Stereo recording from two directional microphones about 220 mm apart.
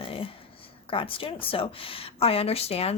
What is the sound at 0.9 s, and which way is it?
Speech, 25° left (ahead or behind).